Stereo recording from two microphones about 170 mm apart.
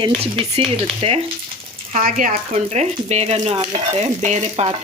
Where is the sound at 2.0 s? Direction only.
55° right (ahead or behind).